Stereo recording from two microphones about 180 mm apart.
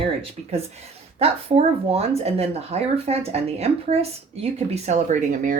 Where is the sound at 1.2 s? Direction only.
30° right (ahead or behind).